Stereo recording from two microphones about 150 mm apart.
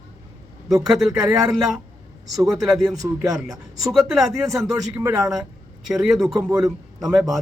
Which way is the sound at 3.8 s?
Centre (ahead or behind).